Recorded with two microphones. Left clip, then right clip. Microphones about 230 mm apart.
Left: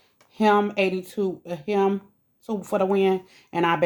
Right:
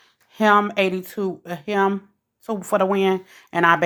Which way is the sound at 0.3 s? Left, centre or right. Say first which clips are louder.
Right 3 dB; right.